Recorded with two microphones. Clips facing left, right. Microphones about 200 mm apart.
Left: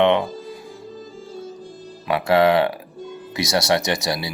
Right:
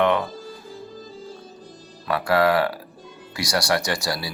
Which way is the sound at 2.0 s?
25° left (ahead or behind).